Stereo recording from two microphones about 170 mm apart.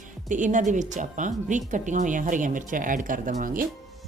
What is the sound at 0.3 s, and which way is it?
Speech, 50° right (ahead or behind).